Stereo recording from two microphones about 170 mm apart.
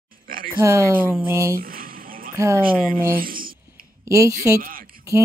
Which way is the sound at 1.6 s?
60° right (ahead or behind).